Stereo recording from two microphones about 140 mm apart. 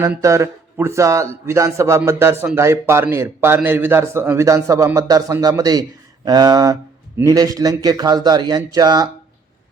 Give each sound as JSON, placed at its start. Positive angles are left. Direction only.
{"t": 0.0, "sound": "a man's voice", "side_deg": -20}